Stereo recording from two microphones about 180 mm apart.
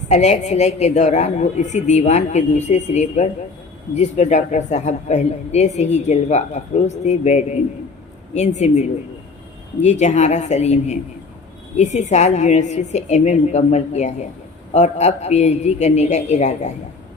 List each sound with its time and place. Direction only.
0.1 s speech: 40° left (ahead or behind)